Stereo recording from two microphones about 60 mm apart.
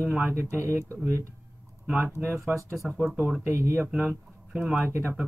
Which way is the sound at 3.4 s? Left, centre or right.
Right.